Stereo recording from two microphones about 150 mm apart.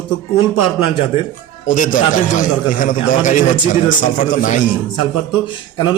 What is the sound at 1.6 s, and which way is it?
A man's voice, 60° left (ahead or behind).